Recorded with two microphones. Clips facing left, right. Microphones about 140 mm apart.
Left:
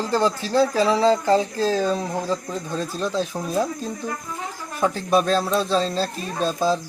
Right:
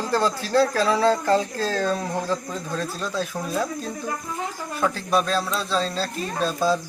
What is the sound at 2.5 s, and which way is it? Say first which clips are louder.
Speech: left 1 dB; 15° left (ahead or behind).